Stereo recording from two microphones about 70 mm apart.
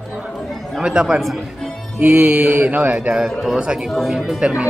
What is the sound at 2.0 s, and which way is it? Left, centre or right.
Speech, right.